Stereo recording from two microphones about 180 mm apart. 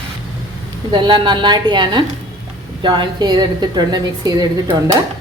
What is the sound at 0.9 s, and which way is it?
Speech, 25° right (ahead or behind).